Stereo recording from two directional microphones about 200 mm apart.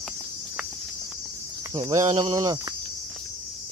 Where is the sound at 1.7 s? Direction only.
20° right (ahead or behind).